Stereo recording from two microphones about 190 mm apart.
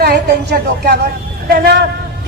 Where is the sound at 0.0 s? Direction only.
60° right (ahead or behind).